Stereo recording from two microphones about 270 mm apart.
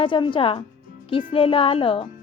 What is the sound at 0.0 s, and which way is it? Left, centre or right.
Speech, centre.